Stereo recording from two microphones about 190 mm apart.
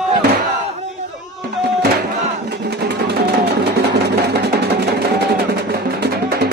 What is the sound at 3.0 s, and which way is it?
Music, 60° right (ahead or behind).